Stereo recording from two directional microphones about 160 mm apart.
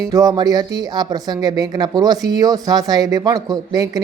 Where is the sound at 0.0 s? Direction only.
20° right (ahead or behind).